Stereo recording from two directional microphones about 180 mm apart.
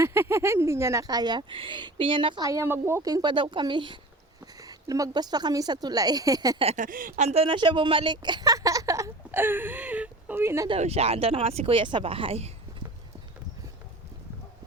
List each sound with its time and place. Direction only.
0.0 s speech: 15° right (ahead or behind)
6.7 s speech: 45° right (ahead or behind); by 10.7 s 15° right (ahead or behind)
10.7 s speech: 35° right (ahead or behind)